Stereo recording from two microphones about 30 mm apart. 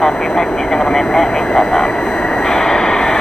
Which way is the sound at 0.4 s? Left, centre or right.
Centre.